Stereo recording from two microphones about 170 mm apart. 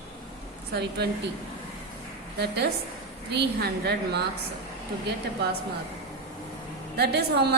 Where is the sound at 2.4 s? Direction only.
70° right (ahead or behind).